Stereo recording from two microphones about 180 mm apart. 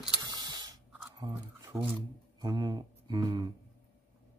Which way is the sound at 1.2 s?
20° right (ahead or behind).